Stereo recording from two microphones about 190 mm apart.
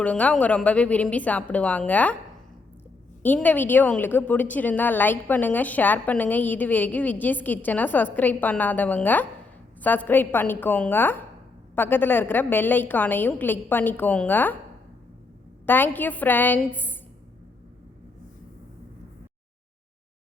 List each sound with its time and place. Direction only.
0.0 s a woman's voice: 5° left (ahead or behind)
3.2 s a woman's voice: 10° left (ahead or behind)
15.6 s a woman's voice: 10° left (ahead or behind)